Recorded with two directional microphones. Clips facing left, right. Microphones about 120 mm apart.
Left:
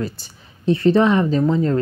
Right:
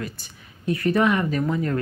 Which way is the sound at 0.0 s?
30° left (ahead or behind).